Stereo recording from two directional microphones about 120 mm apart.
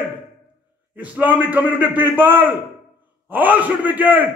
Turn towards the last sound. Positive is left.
turn(degrees=-15)  # may be behind; listen again after turning